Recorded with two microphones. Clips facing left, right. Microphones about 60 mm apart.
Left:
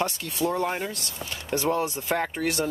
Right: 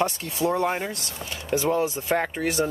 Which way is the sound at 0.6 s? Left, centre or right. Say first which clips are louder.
Right 3 dB; centre.